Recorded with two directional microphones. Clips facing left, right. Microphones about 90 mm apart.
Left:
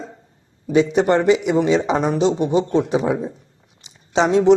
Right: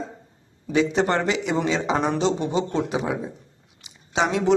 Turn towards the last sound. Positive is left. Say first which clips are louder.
# left 5 dB
turn(degrees=25)  # may be behind; listen again after turning